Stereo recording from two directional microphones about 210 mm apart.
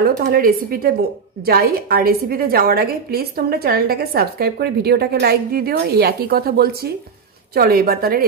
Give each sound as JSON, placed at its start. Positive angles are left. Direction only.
{"t": 0.0, "sound": "a woman's voice", "side_deg": -45}